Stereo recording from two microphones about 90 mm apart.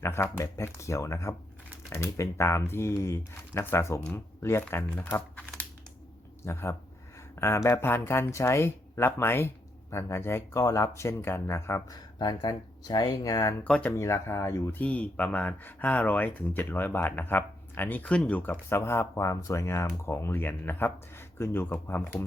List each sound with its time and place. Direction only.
0.0 s speech: 30° left (ahead or behind)
5.4 s crumpling: 15° left (ahead or behind)
6.4 s speech: 30° left (ahead or behind)
11.9 s speech: 50° left (ahead or behind)
13.7 s speech: 10° left (ahead or behind)
13.9 s speech: 35° left (ahead or behind)
14.8 s speech: 15° left (ahead or behind)